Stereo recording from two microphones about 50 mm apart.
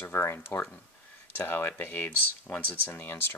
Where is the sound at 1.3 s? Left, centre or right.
Left.